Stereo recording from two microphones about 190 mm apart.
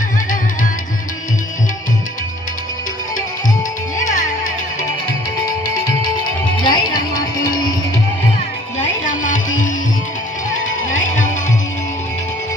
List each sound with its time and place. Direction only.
4.0 s music: 40° left (ahead or behind)
6.6 s music: 25° left (ahead or behind)
9.0 s music: 40° left (ahead or behind)